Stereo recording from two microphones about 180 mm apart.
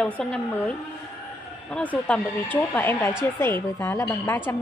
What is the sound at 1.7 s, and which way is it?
Speech, 5° left (ahead or behind).